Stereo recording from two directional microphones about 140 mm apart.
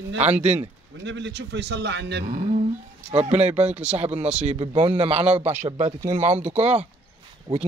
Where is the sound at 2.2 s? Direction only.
60° right (ahead or behind).